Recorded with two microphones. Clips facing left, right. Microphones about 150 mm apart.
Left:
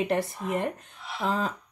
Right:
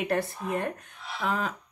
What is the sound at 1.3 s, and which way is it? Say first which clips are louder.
Speech: left 1 dB; 30° left (ahead or behind).